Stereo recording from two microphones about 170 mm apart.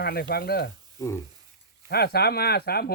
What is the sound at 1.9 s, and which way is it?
Speech, 70° left (ahead or behind).